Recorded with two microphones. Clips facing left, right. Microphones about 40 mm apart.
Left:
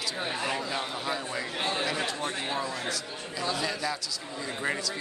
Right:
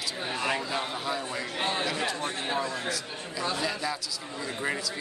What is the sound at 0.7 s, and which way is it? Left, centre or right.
Speech, centre.